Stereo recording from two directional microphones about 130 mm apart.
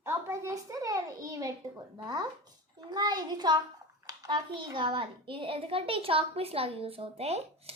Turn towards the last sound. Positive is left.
turn(degrees=-50)  # may be behind; listen again after turning